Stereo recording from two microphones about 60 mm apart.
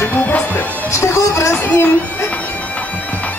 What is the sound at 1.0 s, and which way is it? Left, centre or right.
Speech, left.